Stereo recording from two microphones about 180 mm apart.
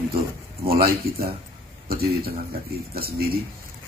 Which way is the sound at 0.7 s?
55° right (ahead or behind).